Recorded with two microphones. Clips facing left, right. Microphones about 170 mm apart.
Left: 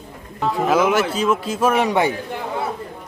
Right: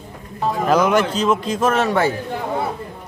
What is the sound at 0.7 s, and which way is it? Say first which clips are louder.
A man's voice: right 2 dB; 5° left (ahead or behind).